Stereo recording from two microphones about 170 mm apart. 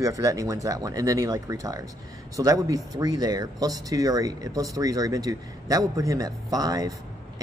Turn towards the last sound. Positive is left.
turn(degrees=-20)  # may be behind; listen again after turning